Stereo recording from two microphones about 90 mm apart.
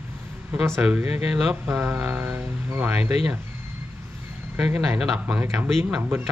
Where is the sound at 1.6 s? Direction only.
20° right (ahead or behind).